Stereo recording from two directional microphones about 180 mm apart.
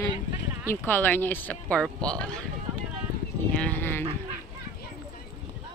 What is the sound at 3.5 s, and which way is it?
Speech, 10° left (ahead or behind).